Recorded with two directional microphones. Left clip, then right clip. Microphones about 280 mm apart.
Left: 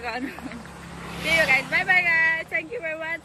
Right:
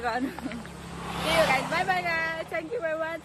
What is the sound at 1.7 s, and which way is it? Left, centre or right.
Speech, centre.